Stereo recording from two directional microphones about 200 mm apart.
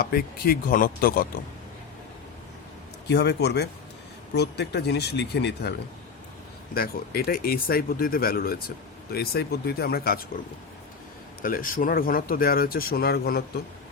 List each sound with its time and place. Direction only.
0.0 s speech: 50° left (ahead or behind)
3.1 s speech: 55° left (ahead or behind)
6.7 s speech: 50° left (ahead or behind)
11.4 s speech: 45° left (ahead or behind)